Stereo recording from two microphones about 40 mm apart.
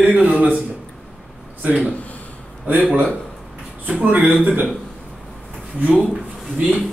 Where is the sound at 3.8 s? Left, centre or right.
Right.